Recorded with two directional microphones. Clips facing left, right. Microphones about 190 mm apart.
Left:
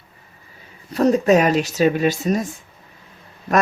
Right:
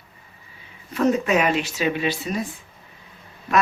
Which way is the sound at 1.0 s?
35° left (ahead or behind).